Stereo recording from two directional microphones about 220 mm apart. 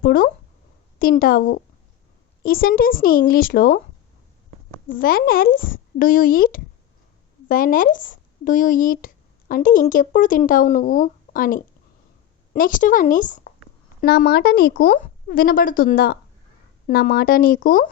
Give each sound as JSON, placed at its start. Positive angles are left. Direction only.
{"t": 0.0, "sound": "speech", "side_deg": 40}
{"t": 4.9, "sound": "speech", "side_deg": 40}